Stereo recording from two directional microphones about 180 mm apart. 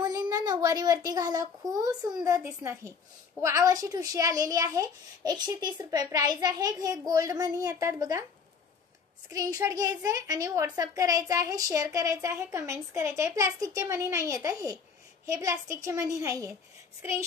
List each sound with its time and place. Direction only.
0.0 s a woman's voice: 20° right (ahead or behind)
9.3 s a child's voice: 20° right (ahead or behind)